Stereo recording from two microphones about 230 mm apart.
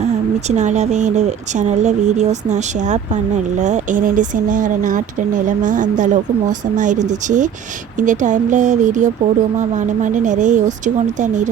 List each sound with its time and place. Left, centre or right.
0.5 s speech: right